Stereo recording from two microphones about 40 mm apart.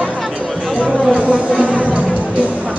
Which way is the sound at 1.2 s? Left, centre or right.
Right.